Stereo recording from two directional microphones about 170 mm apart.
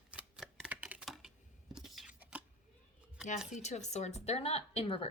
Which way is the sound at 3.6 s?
40° left (ahead or behind).